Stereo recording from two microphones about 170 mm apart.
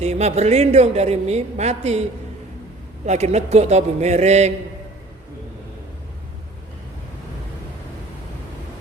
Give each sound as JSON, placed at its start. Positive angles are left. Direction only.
{"t": 0.0, "sound": "a woman's voice", "side_deg": -40}
{"t": 3.1, "sound": "a woman's voice", "side_deg": -40}